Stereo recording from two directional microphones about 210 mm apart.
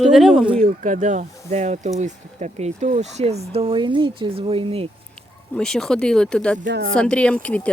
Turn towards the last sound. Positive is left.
turn(degrees=5)  # may be behind; listen again after turning